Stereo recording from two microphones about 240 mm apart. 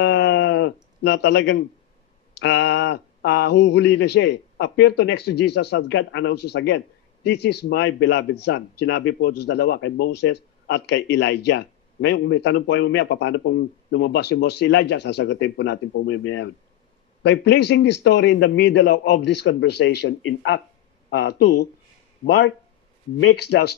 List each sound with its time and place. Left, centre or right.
0.0 s a sound: left
2.3 s speech: left
23.5 s speech: left